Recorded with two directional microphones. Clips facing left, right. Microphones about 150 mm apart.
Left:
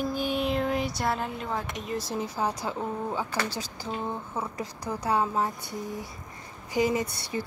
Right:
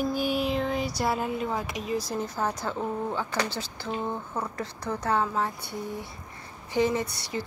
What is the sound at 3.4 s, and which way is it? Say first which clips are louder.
Speech: even; 40° left (ahead or behind).